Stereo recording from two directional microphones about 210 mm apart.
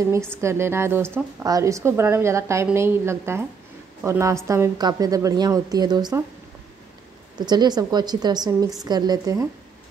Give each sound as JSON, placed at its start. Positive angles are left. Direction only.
{"t": 0.4, "sound": "a woman's voice", "side_deg": -10}
{"t": 7.3, "sound": "a woman's voice", "side_deg": -20}